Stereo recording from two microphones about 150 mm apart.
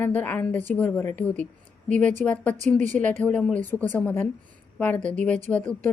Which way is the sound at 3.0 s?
10° left (ahead or behind).